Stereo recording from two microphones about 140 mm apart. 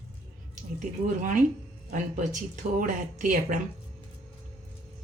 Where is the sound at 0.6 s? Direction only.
65° right (ahead or behind).